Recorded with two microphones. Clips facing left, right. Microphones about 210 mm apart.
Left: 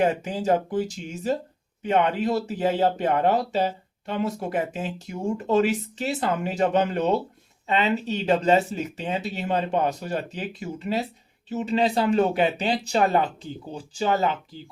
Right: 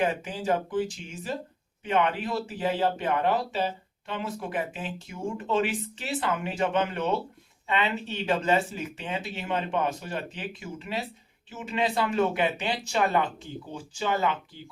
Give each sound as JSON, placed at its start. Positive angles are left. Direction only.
{"t": 0.0, "sound": "speech", "side_deg": 40}